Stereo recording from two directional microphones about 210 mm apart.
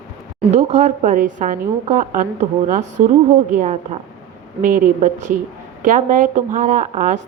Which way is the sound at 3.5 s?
35° right (ahead or behind).